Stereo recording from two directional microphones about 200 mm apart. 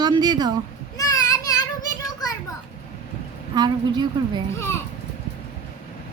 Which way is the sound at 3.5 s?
20° right (ahead or behind).